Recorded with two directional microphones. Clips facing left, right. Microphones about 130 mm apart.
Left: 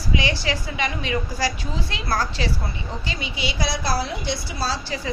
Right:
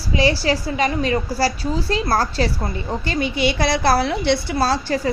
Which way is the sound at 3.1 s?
55° right (ahead or behind).